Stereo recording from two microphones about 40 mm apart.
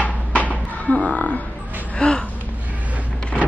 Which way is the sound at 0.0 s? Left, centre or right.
Left.